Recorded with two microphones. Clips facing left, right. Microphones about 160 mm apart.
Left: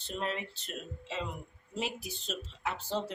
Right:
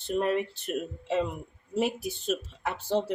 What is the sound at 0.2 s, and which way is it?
Speech, 55° right (ahead or behind).